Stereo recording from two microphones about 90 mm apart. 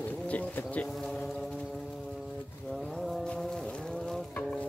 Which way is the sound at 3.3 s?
5° left (ahead or behind).